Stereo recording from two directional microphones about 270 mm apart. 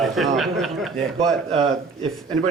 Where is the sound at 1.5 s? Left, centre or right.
Right.